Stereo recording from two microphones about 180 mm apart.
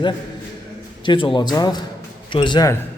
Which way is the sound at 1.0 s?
30° left (ahead or behind).